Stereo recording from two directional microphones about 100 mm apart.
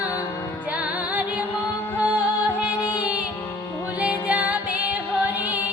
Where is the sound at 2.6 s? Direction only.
15° right (ahead or behind).